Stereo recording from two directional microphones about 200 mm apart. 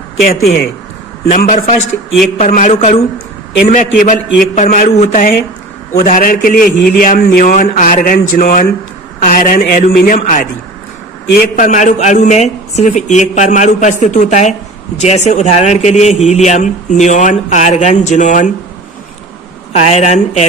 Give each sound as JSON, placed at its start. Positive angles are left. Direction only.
{"t": 1.3, "sound": "a man's voice", "side_deg": 40}
{"t": 19.7, "sound": "a man's voice", "side_deg": 35}